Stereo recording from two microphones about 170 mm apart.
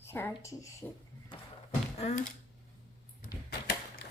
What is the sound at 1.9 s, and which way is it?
Speech, 40° left (ahead or behind).